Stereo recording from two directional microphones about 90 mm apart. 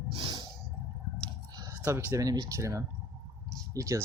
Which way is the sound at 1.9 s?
30° right (ahead or behind).